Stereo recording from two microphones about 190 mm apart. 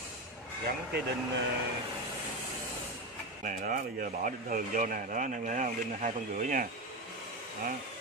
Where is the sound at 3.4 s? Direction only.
45° right (ahead or behind).